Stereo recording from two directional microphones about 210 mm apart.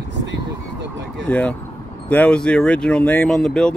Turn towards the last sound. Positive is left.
turn(degrees=0)  # may be behind; listen again after turning